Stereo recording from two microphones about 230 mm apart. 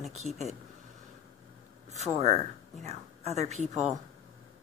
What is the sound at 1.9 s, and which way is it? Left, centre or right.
A woman's voice, right.